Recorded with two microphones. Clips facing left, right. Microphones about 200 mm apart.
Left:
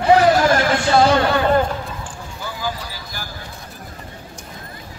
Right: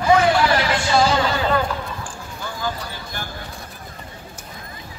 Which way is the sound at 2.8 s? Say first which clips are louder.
Right 1 dB; 5° left (ahead or behind).